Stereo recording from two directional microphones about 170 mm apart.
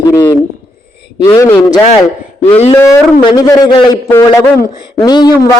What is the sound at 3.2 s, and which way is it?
Speech, 25° left (ahead or behind).